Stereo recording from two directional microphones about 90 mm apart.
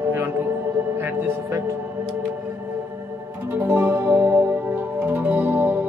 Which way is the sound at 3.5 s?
25° right (ahead or behind).